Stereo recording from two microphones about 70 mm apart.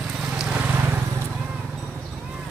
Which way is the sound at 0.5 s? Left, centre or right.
Right.